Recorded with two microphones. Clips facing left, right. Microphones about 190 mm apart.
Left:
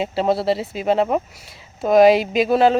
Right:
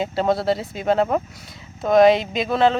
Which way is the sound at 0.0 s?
5° left (ahead or behind).